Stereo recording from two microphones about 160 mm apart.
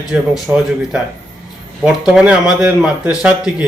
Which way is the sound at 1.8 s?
5° right (ahead or behind).